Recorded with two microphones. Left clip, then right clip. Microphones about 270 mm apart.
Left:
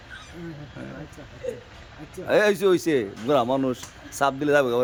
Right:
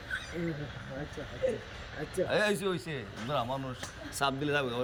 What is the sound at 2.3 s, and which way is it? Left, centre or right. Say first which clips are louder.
Speech: left 12 dB; left.